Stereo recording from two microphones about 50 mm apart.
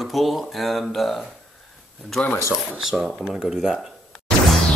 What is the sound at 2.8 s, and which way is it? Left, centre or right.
Speech, centre.